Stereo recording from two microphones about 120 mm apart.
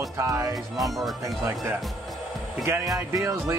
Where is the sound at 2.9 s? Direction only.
30° right (ahead or behind).